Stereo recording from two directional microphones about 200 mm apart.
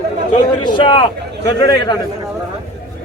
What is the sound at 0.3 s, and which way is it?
A man's voice, 25° left (ahead or behind).